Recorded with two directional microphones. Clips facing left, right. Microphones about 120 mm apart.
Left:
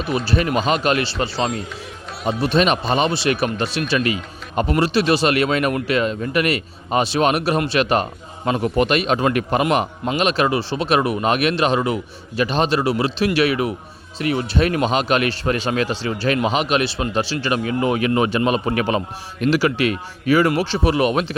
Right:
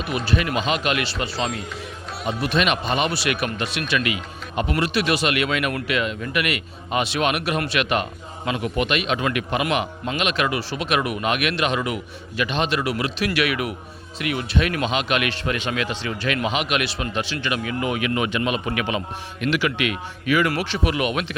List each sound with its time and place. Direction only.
0.3 s speech: 35° left (ahead or behind)